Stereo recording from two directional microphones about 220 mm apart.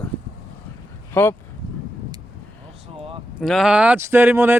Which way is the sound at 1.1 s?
10° left (ahead or behind).